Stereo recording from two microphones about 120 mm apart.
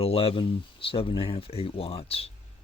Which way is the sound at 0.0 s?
55° left (ahead or behind).